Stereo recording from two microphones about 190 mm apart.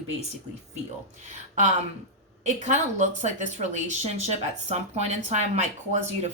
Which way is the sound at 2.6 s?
40° right (ahead or behind).